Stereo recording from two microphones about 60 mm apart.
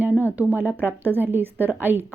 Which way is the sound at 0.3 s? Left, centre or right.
Right.